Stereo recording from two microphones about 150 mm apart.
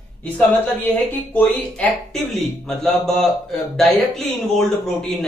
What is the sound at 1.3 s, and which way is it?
A man's voice, 10° left (ahead or behind).